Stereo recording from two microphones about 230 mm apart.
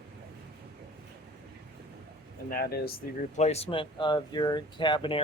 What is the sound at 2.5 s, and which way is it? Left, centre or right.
Speech, left.